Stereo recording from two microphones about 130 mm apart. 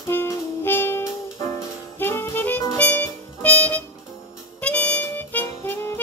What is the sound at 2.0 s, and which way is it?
Saxophone, 15° left (ahead or behind).